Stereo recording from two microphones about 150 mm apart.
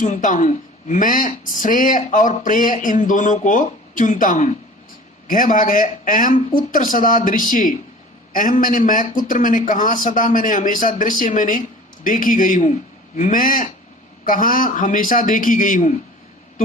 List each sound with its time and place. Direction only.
0.0 s speech: 60° left (ahead or behind)